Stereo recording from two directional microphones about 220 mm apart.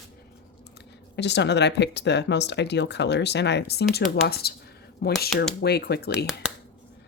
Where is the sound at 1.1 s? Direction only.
50° left (ahead or behind).